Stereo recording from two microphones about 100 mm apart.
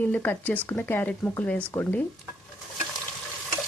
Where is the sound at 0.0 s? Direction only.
15° left (ahead or behind).